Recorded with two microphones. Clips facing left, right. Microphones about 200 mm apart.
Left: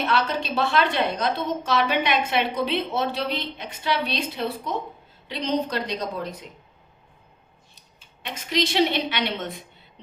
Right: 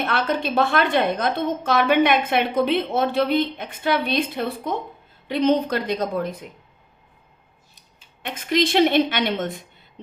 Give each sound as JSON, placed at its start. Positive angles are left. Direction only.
{"t": 0.0, "sound": "a woman's voice", "side_deg": -55}
{"t": 7.8, "sound": "speech", "side_deg": -55}